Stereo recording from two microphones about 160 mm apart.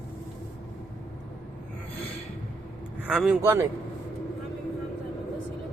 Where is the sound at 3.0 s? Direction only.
5° right (ahead or behind).